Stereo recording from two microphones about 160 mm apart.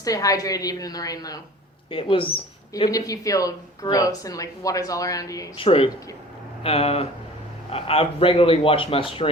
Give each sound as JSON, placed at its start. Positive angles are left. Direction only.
{"t": 0.0, "sound": "speech", "side_deg": 20}
{"t": 1.9, "sound": "a man's voice", "side_deg": 35}
{"t": 5.5, "sound": "a man's voice", "side_deg": 35}